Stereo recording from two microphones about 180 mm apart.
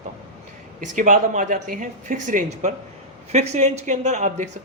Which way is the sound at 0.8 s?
45° right (ahead or behind).